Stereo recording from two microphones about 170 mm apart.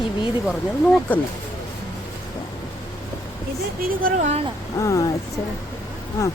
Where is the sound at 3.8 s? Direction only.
55° right (ahead or behind).